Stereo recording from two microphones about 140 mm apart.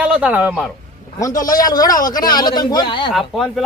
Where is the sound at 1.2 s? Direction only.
25° left (ahead or behind).